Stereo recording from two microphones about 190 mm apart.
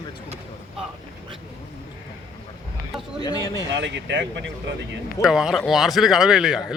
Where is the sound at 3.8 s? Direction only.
70° right (ahead or behind).